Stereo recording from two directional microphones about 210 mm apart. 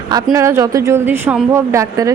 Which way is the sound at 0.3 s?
15° right (ahead or behind).